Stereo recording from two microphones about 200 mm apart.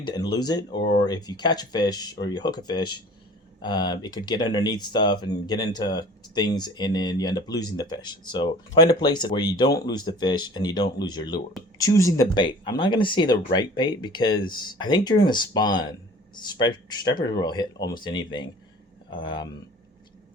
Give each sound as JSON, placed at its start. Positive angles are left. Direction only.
{"t": 0.0, "sound": "speech", "side_deg": 20}